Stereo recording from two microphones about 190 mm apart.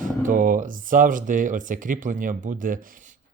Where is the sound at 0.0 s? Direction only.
45° right (ahead or behind).